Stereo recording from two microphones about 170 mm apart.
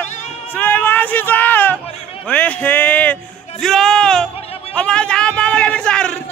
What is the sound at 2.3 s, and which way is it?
Music, 10° left (ahead or behind).